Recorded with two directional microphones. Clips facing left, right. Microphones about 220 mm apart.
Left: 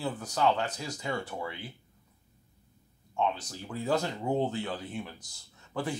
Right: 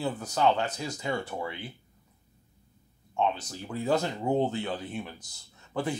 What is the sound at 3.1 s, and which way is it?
Speech, 25° right (ahead or behind).